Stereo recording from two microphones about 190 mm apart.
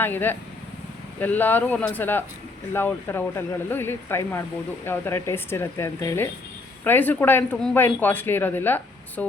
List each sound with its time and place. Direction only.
0.0 s speech: 10° left (ahead or behind)